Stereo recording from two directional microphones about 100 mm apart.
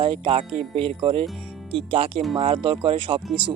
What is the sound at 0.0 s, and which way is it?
Speech, 65° right (ahead or behind).